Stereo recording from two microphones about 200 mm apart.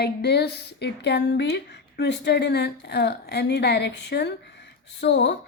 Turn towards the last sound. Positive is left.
turn(degrees=60)  # may be behind; listen again after turning